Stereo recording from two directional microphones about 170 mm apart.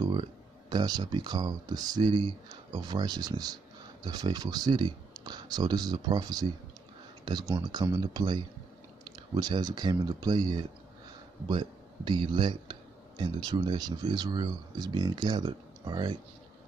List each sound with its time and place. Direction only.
0.0 s speech: 25° right (ahead or behind)